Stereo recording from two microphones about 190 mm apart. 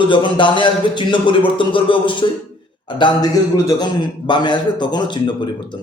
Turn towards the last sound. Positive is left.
turn(degrees=25)  # may be behind; listen again after turning